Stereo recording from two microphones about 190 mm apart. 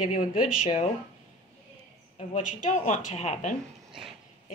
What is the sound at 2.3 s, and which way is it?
A woman's voice, 40° left (ahead or behind).